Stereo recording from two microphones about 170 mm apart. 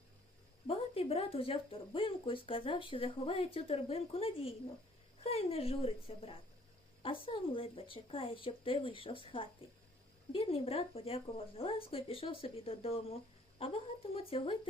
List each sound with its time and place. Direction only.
0.7 s speech: 35° left (ahead or behind)